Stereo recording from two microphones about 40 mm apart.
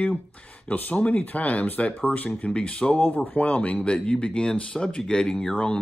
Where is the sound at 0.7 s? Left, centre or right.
Left.